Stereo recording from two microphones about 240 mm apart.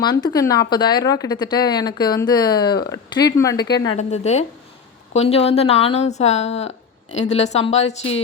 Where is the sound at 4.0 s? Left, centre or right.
Left.